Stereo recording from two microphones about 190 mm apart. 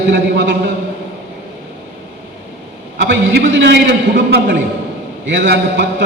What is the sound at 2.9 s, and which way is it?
A man's voice, 60° right (ahead or behind).